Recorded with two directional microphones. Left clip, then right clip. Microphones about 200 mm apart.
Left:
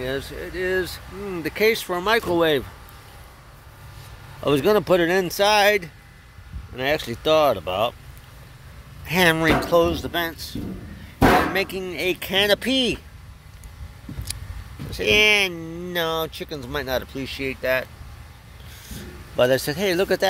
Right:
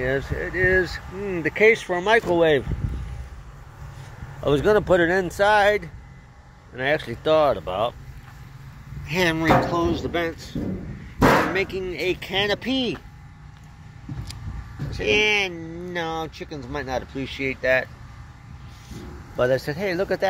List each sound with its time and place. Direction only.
0.0 s speech: 10° left (ahead or behind)
1.2 s speech: 20° left (ahead or behind)
4.4 s speech: 40° left (ahead or behind)
9.0 s speech: 50° left (ahead or behind)
11.5 s speech: 45° left (ahead or behind)
14.9 s speech: 50° left (ahead or behind); by 17.8 s 30° left (ahead or behind)
19.3 s speech: 55° left (ahead or behind)